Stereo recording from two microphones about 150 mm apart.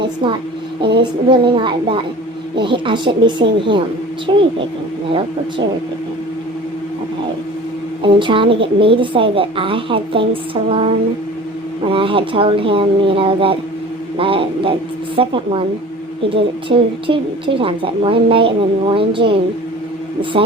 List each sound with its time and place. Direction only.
0.0 s a woman's voice: 30° right (ahead or behind)
8.0 s a woman's voice: 35° right (ahead or behind)